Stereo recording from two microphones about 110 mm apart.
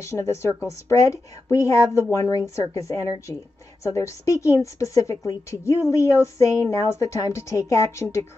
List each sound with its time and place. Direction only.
0.0 s a woman's voice: 25° left (ahead or behind)